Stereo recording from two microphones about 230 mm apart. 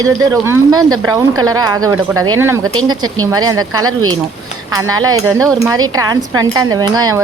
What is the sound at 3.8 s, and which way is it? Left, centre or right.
Speech, right.